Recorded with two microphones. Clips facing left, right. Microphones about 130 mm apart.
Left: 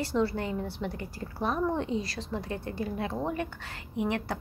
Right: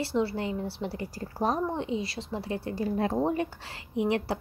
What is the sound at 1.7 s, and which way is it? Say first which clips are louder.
Speech: even; 20° right (ahead or behind).